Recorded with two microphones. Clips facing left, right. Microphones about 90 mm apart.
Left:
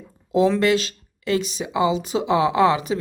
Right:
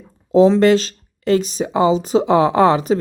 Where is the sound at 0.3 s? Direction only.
30° right (ahead or behind).